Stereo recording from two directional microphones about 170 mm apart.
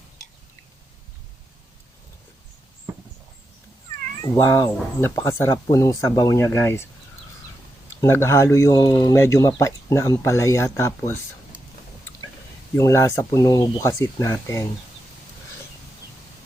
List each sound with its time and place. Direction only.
4.2 s speech: 20° left (ahead or behind)
8.0 s speech: 15° left (ahead or behind)
12.7 s speech: 15° left (ahead or behind)